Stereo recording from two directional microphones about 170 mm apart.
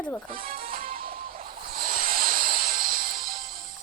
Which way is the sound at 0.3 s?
60° right (ahead or behind).